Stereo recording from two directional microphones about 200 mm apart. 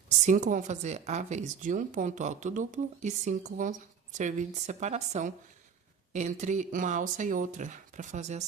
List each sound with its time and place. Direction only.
0.3 s speech: 40° right (ahead or behind)